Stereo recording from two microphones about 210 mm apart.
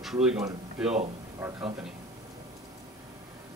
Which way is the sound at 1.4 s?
15° right (ahead or behind).